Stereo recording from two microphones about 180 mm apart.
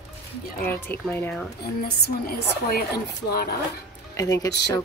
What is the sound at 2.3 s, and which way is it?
Speech, 55° left (ahead or behind).